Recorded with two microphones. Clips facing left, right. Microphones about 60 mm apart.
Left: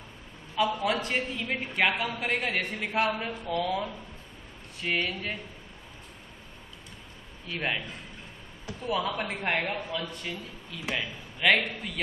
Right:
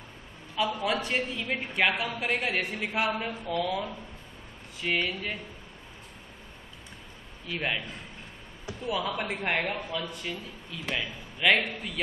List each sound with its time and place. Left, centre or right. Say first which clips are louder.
0.6 s a woman's voice: left 1 dB; centre
4.9 s a woman's voice: even; centre
7.4 s a woman's voice: even; centre
8.8 s a woman's voice: left 1 dB; centre